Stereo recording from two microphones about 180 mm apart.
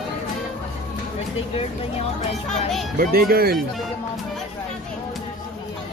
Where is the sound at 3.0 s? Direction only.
55° right (ahead or behind).